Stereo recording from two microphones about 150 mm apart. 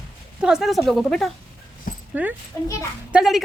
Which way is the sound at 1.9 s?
65° left (ahead or behind).